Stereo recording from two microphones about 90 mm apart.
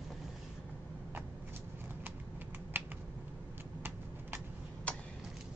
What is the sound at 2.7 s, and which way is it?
Computer keyboard, 25° right (ahead or behind).